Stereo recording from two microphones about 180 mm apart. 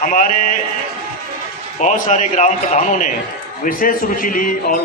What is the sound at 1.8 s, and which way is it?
A man's voice, 45° left (ahead or behind).